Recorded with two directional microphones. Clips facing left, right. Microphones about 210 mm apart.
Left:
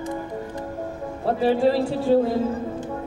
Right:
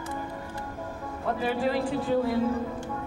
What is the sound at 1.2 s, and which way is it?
Speech, 30° left (ahead or behind).